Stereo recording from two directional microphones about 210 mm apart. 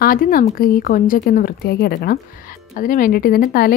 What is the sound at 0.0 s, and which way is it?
A woman's voice, 40° left (ahead or behind).